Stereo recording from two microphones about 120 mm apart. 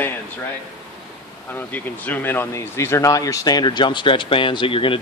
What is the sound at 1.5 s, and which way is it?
Speech, 15° left (ahead or behind).